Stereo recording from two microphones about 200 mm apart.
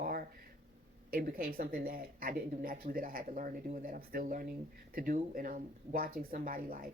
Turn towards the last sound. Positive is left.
turn(degrees=-45)  # may be behind; listen again after turning